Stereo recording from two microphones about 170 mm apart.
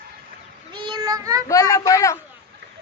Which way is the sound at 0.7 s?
25° right (ahead or behind).